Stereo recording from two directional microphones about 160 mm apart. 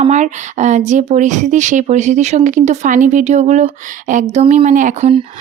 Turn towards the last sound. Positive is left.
turn(degrees=-55)  # may be behind; listen again after turning